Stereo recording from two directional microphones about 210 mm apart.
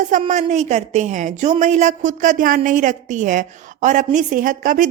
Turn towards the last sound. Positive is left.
turn(degrees=-40)  # may be behind; listen again after turning